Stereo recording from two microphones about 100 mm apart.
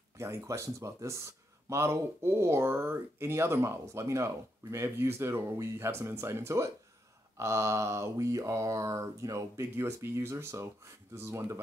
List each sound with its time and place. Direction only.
0.2 s speech: 30° right (ahead or behind)